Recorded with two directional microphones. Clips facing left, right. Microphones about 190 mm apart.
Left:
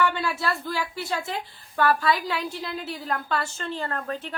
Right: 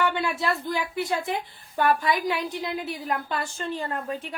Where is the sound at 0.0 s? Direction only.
20° right (ahead or behind).